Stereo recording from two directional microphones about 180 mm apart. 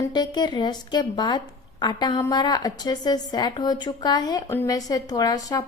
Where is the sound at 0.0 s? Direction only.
25° left (ahead or behind).